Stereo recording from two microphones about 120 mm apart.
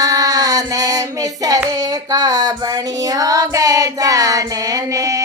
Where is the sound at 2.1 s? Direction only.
30° right (ahead or behind).